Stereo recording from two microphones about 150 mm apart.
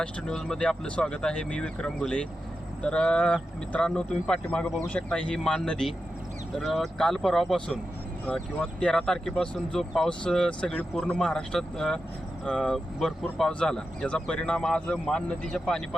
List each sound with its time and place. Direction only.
0.0 s speech: 5° left (ahead or behind)